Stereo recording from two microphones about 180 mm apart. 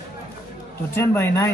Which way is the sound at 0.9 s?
15° left (ahead or behind).